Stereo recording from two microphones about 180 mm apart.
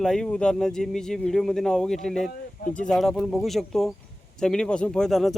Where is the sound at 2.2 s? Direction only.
45° left (ahead or behind).